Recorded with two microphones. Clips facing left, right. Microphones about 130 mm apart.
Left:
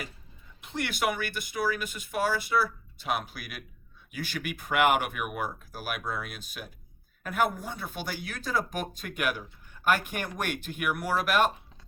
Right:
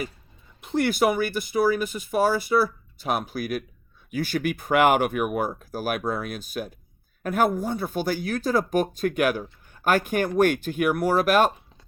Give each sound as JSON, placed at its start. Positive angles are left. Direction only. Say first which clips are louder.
{"t": 0.6, "sound": "speech", "louder": "right 8 dB", "side_deg": -40}